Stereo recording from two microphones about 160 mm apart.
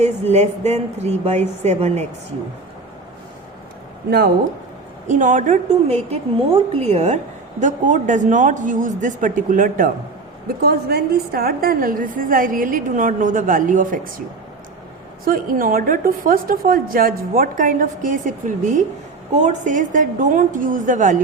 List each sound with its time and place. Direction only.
0.3 s speech: 45° right (ahead or behind)
5.0 s speech: 50° right (ahead or behind)
10.6 s a woman's voice: 75° right (ahead or behind); by 14.1 s 60° right (ahead or behind)
15.2 s a woman's voice: 60° right (ahead or behind)